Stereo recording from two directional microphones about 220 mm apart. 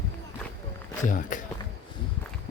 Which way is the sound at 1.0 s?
35° left (ahead or behind).